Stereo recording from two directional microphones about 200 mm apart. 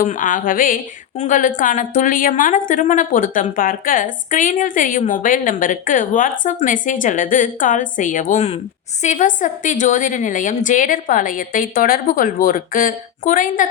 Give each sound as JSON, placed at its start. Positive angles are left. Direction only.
{"t": 0.0, "sound": "a woman's voice", "side_deg": 40}